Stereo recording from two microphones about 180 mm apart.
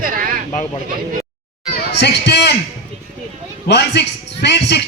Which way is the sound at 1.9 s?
70° left (ahead or behind).